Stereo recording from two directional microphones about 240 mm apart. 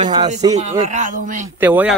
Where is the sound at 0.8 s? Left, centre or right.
Right.